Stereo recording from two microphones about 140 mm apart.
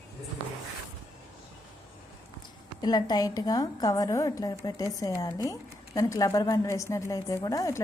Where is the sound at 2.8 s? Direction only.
30° left (ahead or behind).